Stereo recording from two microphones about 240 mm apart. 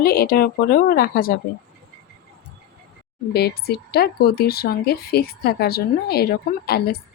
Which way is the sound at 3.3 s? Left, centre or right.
Left.